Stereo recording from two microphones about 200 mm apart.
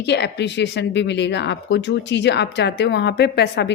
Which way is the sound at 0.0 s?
60° left (ahead or behind).